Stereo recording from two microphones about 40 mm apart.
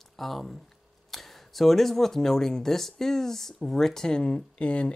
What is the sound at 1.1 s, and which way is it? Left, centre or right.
Speech, centre.